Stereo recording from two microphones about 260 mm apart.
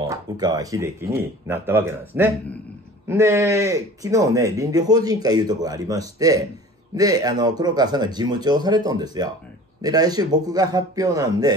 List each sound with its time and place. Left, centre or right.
0.0 s speech: centre